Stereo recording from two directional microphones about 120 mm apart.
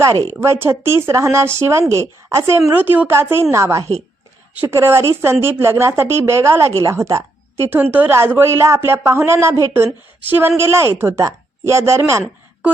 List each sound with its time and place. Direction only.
0.0 s speech: 25° right (ahead or behind)